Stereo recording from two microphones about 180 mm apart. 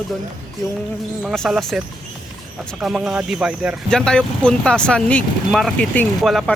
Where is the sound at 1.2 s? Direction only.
Centre (ahead or behind).